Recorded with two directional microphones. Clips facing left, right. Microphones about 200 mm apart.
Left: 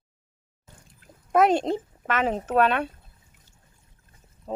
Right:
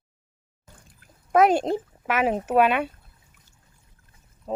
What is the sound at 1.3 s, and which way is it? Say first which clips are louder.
Speech: right 1 dB; centre (ahead or behind).